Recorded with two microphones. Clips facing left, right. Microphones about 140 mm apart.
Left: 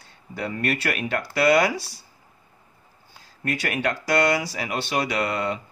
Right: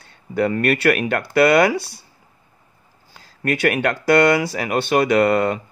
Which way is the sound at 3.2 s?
65° right (ahead or behind).